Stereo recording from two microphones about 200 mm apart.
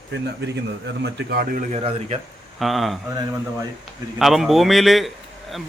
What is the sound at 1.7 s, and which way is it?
Speech, 30° right (ahead or behind).